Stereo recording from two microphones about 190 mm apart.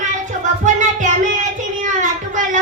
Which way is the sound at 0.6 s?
40° right (ahead or behind).